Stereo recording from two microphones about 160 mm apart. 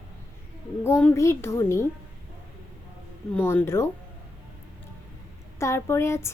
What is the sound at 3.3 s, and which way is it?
Speech, 15° left (ahead or behind).